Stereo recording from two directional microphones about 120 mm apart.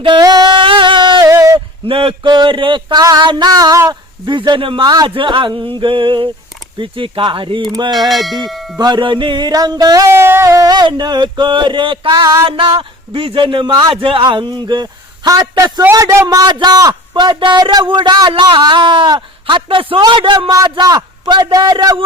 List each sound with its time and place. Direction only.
0.0 s music: 40° right (ahead or behind)
1.2 s a sound: 25° right (ahead or behind)
1.9 s a man's voice: 50° right (ahead or behind); by 3.9 s 30° right (ahead or behind)
4.3 s a man's voice: 40° right (ahead or behind)
7.9 s speech: centre (ahead or behind)
8.8 s a man's voice: 40° right (ahead or behind)
10.1 s a man's voice: 20° right (ahead or behind); by 22.0 s 40° right (ahead or behind)